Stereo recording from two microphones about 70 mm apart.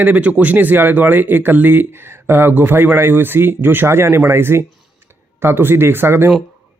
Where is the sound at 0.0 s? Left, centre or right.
Right.